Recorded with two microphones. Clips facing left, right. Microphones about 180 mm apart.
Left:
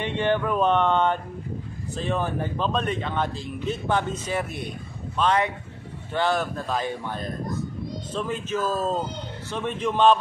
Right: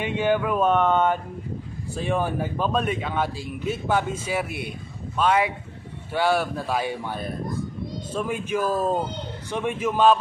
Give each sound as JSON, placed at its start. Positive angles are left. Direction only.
{"t": 0.0, "sound": "speech", "side_deg": -5}